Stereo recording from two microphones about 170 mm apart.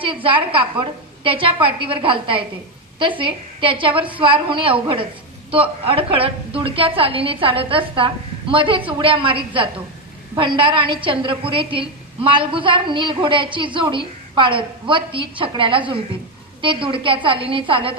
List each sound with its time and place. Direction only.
0.0 s a woman's voice: 30° right (ahead or behind)